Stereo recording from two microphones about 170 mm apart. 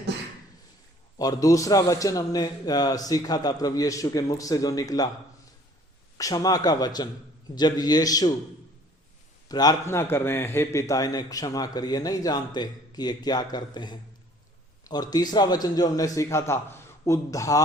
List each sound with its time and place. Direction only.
1.2 s a man's voice: 20° left (ahead or behind)
6.1 s a man's voice: 20° left (ahead or behind)
9.5 s a man's voice: 25° left (ahead or behind)